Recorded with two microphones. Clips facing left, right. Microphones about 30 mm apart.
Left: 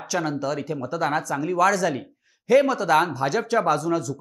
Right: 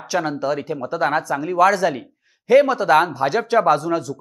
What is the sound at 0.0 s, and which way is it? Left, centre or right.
Speech, right.